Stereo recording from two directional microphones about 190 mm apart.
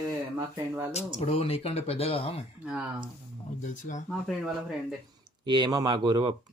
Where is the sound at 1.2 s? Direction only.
30° left (ahead or behind).